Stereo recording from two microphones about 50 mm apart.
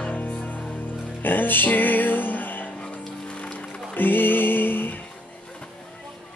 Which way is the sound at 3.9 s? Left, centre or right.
Left.